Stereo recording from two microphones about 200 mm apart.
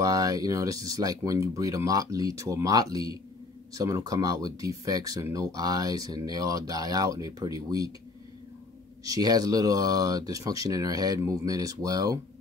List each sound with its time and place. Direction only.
0.0 s speech: 15° right (ahead or behind)
9.0 s speech: 20° right (ahead or behind)